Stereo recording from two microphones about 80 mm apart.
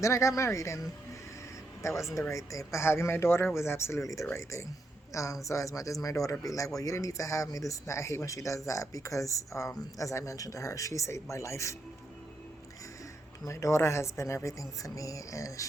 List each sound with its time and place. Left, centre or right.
0.0 s speech: left
13.4 s speech: left